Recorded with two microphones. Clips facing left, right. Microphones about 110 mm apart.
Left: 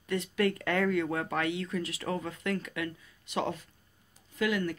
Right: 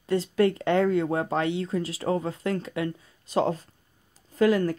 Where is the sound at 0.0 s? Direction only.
30° right (ahead or behind).